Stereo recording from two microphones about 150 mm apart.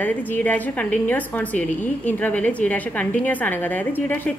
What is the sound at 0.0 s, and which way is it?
A woman's voice, 10° left (ahead or behind).